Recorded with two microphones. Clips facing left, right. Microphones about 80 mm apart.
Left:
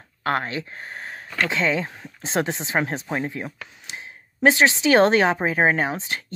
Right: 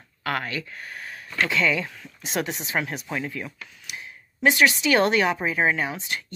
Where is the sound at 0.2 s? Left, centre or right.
Left.